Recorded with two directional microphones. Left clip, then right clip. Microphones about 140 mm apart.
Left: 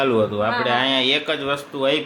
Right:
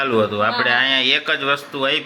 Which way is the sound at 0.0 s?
15° left (ahead or behind).